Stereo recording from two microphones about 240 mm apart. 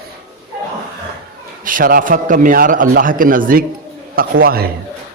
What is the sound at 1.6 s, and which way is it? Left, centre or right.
A man's voice, right.